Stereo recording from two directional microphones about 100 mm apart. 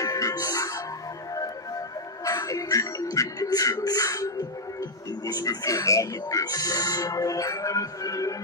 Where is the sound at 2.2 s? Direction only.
35° left (ahead or behind).